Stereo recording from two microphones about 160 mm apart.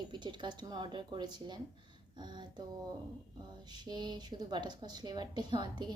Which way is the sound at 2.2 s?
25° right (ahead or behind).